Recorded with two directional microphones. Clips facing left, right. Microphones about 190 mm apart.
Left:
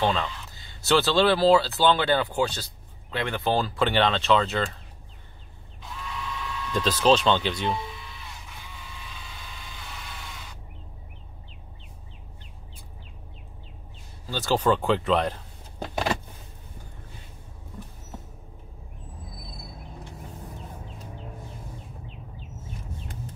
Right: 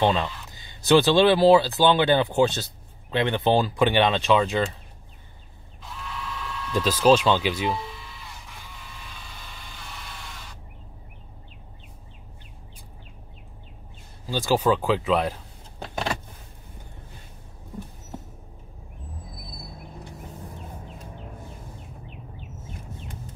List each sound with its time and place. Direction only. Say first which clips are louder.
0.0 s speech: right 3 dB; 20° right (ahead or behind)
5.8 s mechanisms: even; centre (ahead or behind)
14.2 s speech: right 2 dB; 10° right (ahead or behind)
15.8 s power windows: left 2 dB; 5° left (ahead or behind)